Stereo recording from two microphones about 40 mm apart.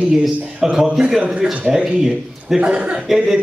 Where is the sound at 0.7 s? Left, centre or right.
Centre.